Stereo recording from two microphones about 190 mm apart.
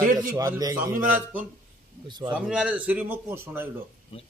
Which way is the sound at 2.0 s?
25° right (ahead or behind).